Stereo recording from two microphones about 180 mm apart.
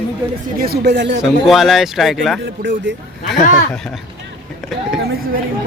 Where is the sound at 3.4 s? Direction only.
45° left (ahead or behind).